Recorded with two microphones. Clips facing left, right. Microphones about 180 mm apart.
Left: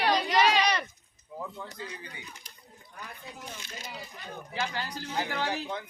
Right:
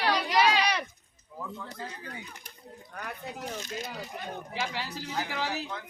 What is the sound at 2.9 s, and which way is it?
Speech, 70° right (ahead or behind).